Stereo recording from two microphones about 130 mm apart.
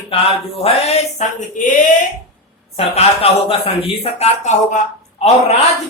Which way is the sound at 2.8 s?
50° left (ahead or behind).